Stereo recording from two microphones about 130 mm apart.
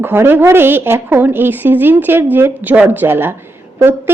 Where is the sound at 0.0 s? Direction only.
15° right (ahead or behind).